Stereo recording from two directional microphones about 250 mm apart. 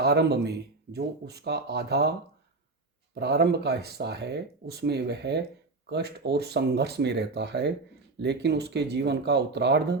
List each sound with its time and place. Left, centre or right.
0.0 s speech: right
3.2 s speech: right